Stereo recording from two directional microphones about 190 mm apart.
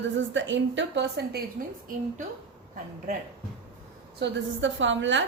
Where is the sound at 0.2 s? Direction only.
75° right (ahead or behind).